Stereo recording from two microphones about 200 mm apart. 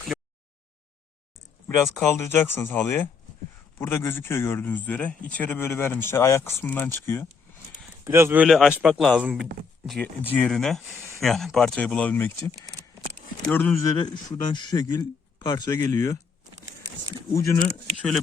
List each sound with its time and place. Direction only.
1.6 s speech: 5° left (ahead or behind)
8.0 s speech: 10° right (ahead or behind); by 16.1 s 20° left (ahead or behind)
17.3 s speech: 15° left (ahead or behind)